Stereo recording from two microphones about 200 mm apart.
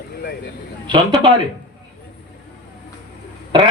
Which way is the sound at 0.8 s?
25° right (ahead or behind).